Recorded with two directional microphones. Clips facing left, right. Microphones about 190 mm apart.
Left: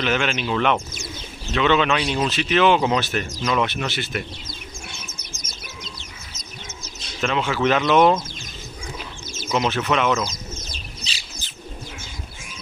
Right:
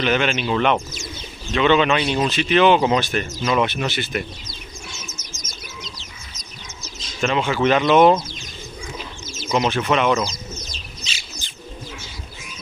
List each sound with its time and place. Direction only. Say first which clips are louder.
0.0 s speech: right 2 dB; centre (ahead or behind)
4.5 s bird: even; 55° left (ahead or behind)
7.2 s speech: right 2 dB; centre (ahead or behind)
9.5 s speech: right 2 dB; centre (ahead or behind)
11.1 s bird: right 1 dB; 35° left (ahead or behind)